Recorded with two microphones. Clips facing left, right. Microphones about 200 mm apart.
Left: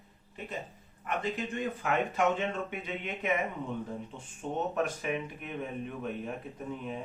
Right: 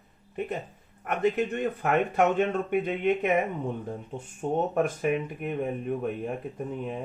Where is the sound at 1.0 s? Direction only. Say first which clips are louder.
Right 8 dB; 60° right (ahead or behind).